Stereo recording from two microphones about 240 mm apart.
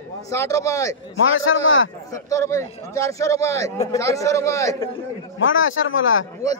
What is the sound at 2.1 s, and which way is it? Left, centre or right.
A man's voice, centre.